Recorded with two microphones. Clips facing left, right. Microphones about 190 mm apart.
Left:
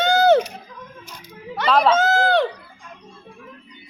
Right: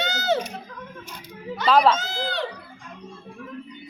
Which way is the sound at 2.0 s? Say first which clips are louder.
Left 12 dB; 50° left (ahead or behind).